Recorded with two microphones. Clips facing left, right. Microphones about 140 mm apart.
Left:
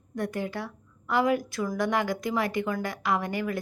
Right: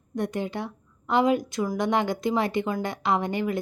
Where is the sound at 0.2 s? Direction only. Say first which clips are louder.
Right 2 dB; 20° right (ahead or behind).